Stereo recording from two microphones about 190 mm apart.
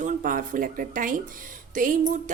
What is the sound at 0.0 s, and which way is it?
A woman's voice, 45° right (ahead or behind).